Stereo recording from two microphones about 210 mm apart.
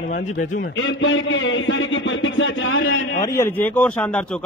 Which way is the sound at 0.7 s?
65° left (ahead or behind).